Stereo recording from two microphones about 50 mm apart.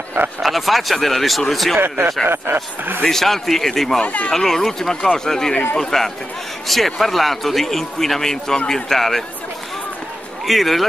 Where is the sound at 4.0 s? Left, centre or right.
Left.